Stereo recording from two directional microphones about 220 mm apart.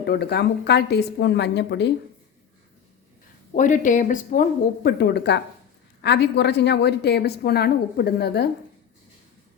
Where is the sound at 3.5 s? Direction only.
35° left (ahead or behind).